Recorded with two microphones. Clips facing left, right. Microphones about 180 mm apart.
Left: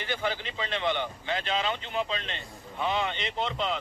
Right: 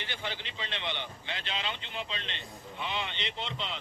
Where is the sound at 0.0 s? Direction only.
45° left (ahead or behind).